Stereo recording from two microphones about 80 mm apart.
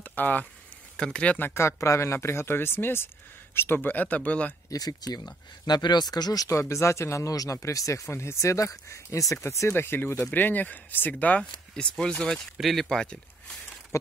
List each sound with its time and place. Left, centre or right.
0.0 s a sound: left
0.9 s speech: centre
1.5 s speech: left; by 4.6 s centre
4.6 s speech: left
6.5 s speech: left; by 13.6 s centre